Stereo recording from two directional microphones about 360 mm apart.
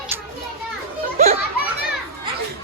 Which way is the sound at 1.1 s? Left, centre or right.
Centre.